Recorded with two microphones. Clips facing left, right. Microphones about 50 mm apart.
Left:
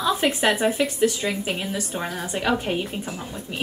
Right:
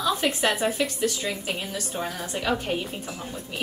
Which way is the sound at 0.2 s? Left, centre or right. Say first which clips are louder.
Left 3 dB; left.